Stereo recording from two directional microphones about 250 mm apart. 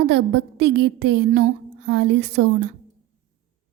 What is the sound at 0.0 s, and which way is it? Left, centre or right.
A woman's voice, right.